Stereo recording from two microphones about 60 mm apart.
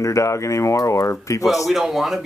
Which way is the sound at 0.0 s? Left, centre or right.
Left.